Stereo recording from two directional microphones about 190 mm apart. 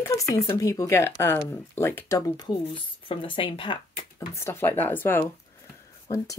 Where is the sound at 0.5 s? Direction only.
15° left (ahead or behind).